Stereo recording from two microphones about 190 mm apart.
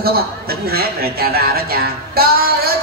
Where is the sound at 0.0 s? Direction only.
55° right (ahead or behind).